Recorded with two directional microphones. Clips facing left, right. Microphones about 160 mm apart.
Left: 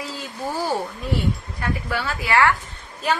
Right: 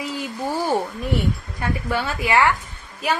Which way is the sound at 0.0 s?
15° right (ahead or behind).